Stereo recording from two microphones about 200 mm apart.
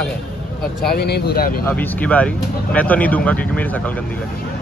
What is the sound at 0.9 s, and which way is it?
Speech, 55° left (ahead or behind).